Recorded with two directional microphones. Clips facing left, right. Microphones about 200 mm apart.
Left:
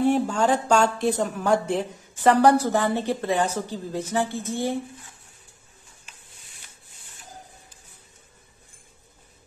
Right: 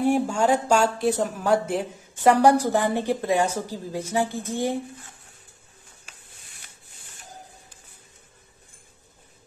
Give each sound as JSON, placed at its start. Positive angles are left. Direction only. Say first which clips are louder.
{"t": 0.0, "sound": "a woman's voice", "louder": "even", "side_deg": -10}